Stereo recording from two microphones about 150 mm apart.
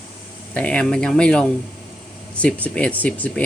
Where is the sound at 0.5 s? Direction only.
10° left (ahead or behind).